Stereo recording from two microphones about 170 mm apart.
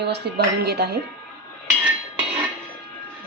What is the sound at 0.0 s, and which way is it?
Speech, 80° right.